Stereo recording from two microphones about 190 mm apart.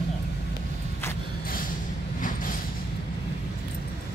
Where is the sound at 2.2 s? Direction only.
45° left (ahead or behind).